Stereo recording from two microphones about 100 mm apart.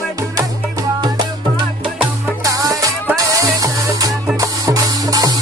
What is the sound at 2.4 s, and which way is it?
Music, 35° right (ahead or behind).